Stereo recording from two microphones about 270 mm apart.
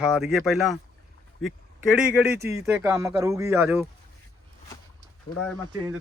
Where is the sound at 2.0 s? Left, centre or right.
Centre.